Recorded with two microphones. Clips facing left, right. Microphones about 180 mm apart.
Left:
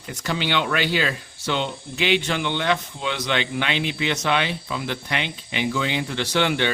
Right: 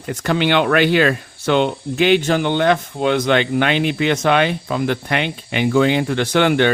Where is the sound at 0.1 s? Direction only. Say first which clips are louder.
Right 8 dB; 55° right (ahead or behind).